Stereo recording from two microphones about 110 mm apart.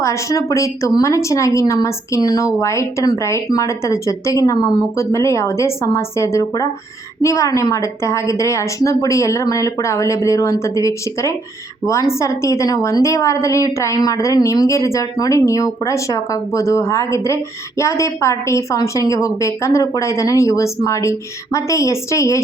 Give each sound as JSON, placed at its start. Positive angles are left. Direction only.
{"t": 0.0, "sound": "a woman's voice", "side_deg": 30}